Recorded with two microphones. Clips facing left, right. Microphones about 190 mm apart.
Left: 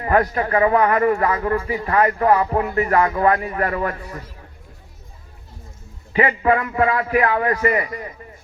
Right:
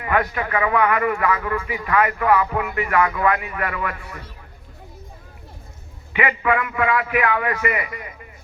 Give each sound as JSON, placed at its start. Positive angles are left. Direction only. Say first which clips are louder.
{"t": 0.0, "sound": "speech", "louder": "left 4 dB", "side_deg": 35}
{"t": 6.1, "sound": "speech", "louder": "left 3 dB", "side_deg": 35}